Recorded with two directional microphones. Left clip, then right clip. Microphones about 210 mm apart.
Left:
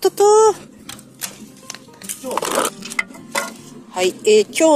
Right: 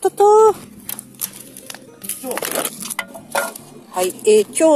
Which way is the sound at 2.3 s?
35° left (ahead or behind).